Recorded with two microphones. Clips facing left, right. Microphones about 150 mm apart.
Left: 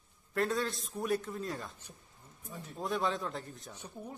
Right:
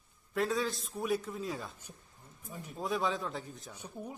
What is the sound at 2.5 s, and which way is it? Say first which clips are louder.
Speech: right 1 dB; 15° right (ahead or behind).